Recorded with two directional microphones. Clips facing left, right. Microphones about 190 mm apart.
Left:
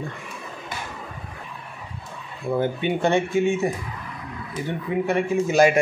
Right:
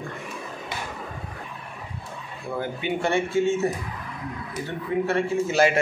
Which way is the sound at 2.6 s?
20° left (ahead or behind).